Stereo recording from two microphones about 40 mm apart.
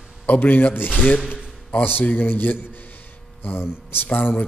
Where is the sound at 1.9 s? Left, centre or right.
Left.